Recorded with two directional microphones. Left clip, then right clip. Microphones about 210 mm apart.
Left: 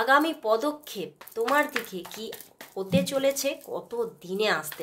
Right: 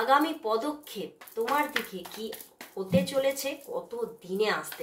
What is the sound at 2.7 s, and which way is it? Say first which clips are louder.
Speech: left 1 dB; 50° left (ahead or behind).